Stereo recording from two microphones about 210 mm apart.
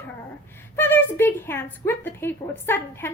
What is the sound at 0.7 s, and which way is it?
A woman's voice, 10° left (ahead or behind).